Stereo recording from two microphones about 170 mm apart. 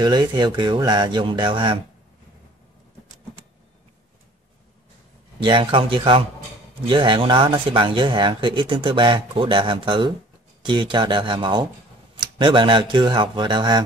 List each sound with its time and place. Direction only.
0.0 s speech: 25° right (ahead or behind)
5.4 s speech: 30° right (ahead or behind)